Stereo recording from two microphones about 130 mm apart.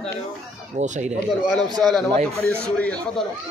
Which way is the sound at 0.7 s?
65° right (ahead or behind).